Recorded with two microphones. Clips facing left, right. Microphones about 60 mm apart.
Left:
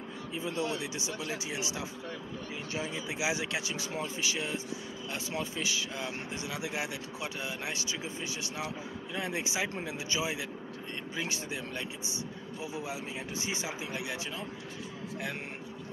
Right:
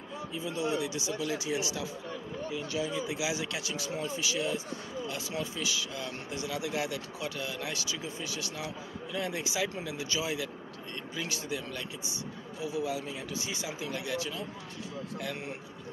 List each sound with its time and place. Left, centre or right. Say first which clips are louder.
0.3 s speech: right 1 dB; left